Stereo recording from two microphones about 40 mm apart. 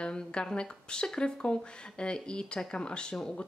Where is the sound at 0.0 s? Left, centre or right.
Left.